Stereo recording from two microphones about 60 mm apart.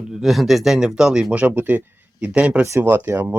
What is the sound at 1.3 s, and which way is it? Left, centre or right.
Speech, right.